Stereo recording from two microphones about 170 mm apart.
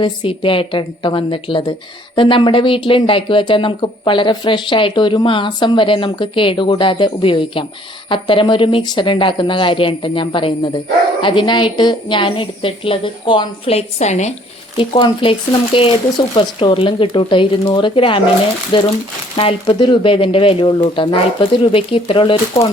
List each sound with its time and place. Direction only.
0.0 s speech: 30° left (ahead or behind)
14.8 s speech: 30° left (ahead or behind)